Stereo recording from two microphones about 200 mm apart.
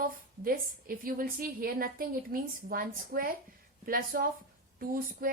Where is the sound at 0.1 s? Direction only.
45° right (ahead or behind).